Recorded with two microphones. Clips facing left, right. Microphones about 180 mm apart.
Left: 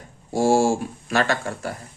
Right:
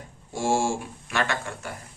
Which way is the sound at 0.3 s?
40° left (ahead or behind).